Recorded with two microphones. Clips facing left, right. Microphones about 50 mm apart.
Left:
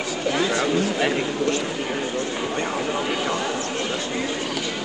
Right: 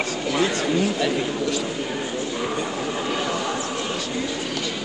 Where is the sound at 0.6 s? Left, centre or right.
Left.